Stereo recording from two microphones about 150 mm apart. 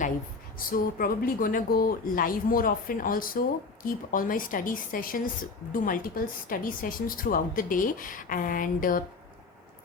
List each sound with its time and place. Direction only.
0.7 s speech: 75° left (ahead or behind)